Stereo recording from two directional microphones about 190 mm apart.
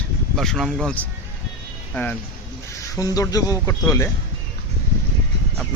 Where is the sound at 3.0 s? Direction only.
20° left (ahead or behind).